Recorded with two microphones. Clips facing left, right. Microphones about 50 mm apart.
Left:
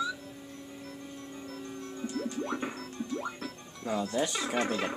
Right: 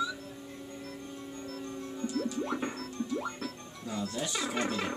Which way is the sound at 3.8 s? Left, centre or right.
Left.